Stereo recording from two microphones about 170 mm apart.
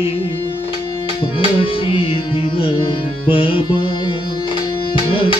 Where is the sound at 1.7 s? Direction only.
30° left (ahead or behind).